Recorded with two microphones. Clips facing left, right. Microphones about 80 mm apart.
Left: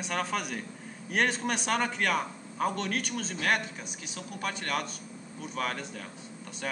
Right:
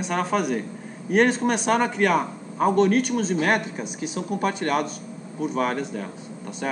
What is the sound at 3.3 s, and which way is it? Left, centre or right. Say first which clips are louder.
Speech: right 4 dB; right.